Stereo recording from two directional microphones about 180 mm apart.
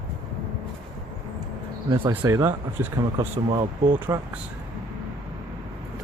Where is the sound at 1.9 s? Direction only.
20° right (ahead or behind).